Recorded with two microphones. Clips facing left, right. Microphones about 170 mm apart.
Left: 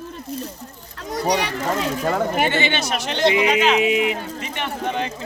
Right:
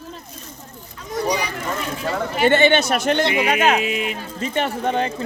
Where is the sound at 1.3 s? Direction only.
85° left.